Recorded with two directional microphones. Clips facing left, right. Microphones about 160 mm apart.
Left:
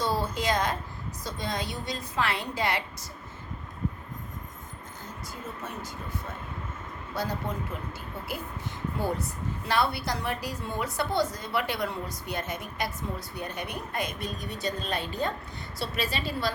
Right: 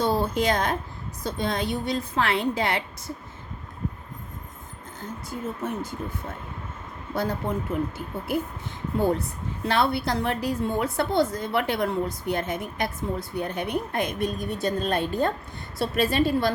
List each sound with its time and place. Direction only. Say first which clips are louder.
0.2 s a woman's voice: right 4 dB; 55° right (ahead or behind)
5.6 s speech: right 8 dB; 55° right (ahead or behind)
7.2 s speech: right 5 dB; 55° right (ahead or behind)
9.6 s a woman's voice: right 4 dB; 55° right (ahead or behind)